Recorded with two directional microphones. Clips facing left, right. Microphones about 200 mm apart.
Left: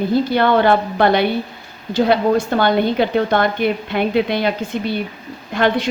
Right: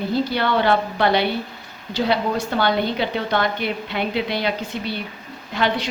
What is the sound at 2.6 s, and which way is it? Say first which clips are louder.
A woman's voice: left 5 dB; 50° left (ahead or behind).